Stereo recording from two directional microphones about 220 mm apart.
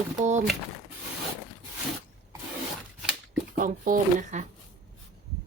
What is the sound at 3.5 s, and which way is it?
Speech, 40° right (ahead or behind).